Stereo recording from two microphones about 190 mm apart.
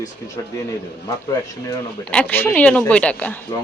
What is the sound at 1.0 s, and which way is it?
Speech, 20° left (ahead or behind).